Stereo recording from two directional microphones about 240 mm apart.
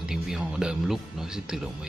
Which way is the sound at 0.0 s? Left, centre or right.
Centre.